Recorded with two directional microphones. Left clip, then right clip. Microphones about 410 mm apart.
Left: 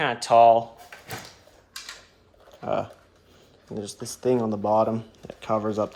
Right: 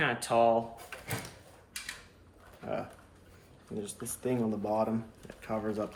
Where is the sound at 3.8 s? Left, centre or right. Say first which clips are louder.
Left 6 dB; centre.